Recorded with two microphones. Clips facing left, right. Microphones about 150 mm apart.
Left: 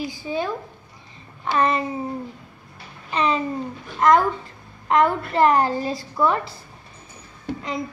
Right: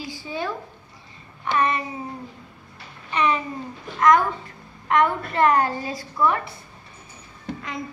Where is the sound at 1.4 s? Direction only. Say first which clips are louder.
Left 2 dB; 30° left (ahead or behind).